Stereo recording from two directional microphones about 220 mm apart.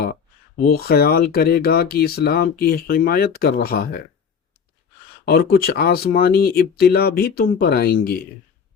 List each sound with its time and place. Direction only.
0.6 s speech: 45° left (ahead or behind)
5.2 s speech: 45° left (ahead or behind)